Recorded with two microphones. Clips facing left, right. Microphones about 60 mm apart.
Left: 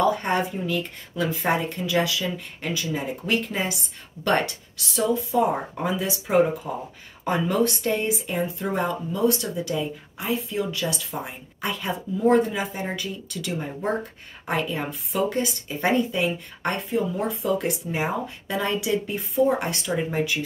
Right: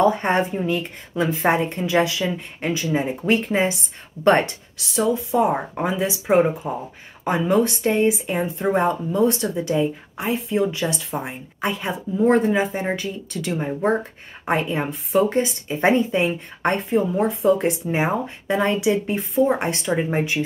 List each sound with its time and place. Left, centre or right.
0.0 s speech: right